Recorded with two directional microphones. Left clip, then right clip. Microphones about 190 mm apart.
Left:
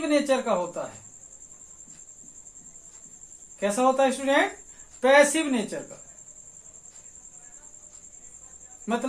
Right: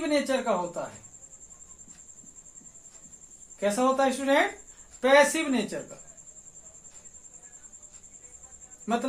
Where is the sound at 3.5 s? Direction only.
35° left (ahead or behind).